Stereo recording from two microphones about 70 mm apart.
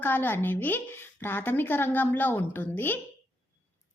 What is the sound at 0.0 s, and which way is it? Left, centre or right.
A woman's voice, left.